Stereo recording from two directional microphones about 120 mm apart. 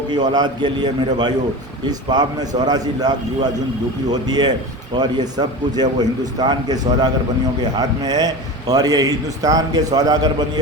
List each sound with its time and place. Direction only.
0.1 s a man's voice: 35° right (ahead or behind)